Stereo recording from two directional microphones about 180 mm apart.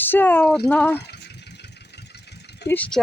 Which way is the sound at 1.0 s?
70° left (ahead or behind).